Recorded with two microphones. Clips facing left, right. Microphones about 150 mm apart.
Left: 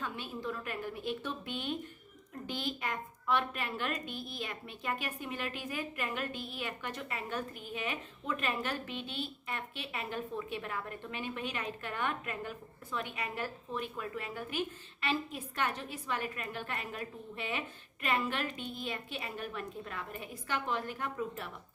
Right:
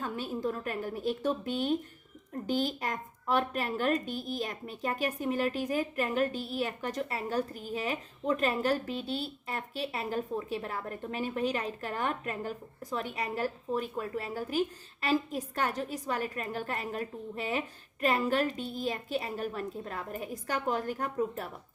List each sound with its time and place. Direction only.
0.0 s a woman's voice: 40° right (ahead or behind)